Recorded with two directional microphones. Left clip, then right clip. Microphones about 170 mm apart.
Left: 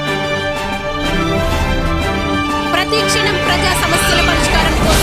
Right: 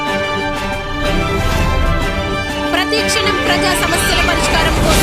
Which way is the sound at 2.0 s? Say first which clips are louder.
Left 2 dB; centre (ahead or behind).